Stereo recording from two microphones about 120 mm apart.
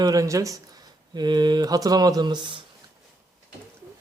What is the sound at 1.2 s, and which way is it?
Speech, 35° right (ahead or behind).